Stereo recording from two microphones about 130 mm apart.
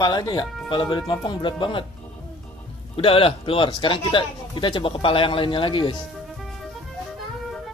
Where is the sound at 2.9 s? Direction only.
45° left (ahead or behind).